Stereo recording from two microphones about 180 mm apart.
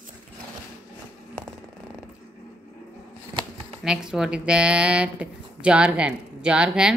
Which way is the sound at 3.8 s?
5° right (ahead or behind).